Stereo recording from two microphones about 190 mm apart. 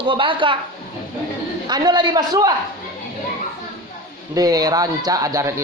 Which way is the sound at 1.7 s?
20° right (ahead or behind).